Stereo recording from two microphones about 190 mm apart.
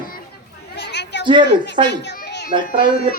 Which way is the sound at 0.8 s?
65° left (ahead or behind).